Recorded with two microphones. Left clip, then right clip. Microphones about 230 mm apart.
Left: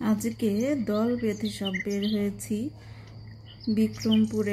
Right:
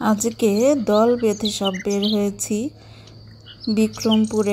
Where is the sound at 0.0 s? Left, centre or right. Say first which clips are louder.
Right 9 dB; right.